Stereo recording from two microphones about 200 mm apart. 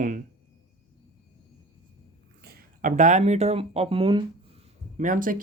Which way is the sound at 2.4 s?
50° right (ahead or behind).